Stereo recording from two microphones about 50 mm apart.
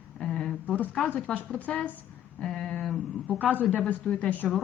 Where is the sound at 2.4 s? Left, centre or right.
Centre.